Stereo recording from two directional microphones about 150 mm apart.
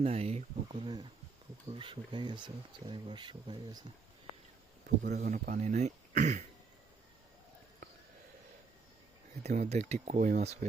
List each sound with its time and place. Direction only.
0.0 s speech: 45° right (ahead or behind)
5.1 s speech: 55° right (ahead or behind)
9.4 s speech: 50° right (ahead or behind)